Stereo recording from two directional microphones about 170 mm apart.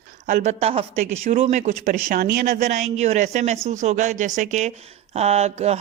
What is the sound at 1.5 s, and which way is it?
Speech, 50° right (ahead or behind).